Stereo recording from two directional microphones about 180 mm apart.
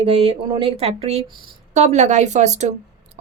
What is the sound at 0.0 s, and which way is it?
Speech, 35° right (ahead or behind).